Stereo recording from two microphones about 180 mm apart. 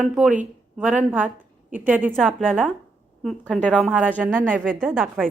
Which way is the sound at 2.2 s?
Centre (ahead or behind).